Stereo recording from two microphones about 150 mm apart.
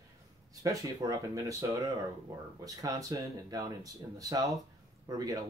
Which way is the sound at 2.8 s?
25° right (ahead or behind).